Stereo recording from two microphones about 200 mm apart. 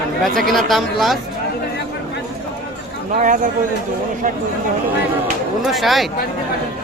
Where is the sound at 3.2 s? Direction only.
40° right (ahead or behind).